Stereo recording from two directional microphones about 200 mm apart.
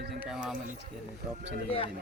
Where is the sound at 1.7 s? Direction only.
25° left (ahead or behind).